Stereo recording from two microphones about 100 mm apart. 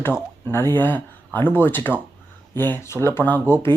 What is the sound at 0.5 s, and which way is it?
A man's voice, 20° left (ahead or behind).